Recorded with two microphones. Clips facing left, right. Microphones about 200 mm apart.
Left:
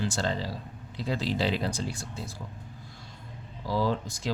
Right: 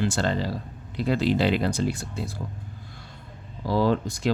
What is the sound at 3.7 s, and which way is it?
Speech, 65° right (ahead or behind).